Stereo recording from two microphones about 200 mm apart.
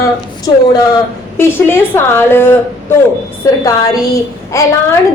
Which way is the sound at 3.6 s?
15° left (ahead or behind).